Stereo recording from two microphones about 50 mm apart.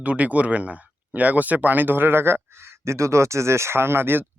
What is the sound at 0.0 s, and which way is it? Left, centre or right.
Speech, right.